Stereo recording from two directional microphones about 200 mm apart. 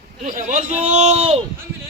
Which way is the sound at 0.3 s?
40° right (ahead or behind).